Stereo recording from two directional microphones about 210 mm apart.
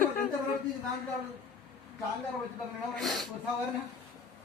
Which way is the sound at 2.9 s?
Centre (ahead or behind).